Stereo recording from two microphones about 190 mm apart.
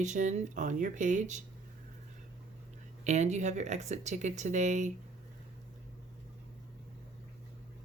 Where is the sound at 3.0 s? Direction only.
40° right (ahead or behind).